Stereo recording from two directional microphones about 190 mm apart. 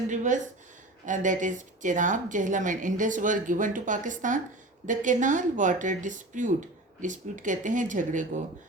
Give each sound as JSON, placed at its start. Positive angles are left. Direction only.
{"t": 0.1, "sound": "speech", "side_deg": -40}